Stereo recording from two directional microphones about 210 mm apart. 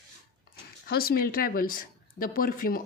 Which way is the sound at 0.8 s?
45° left (ahead or behind).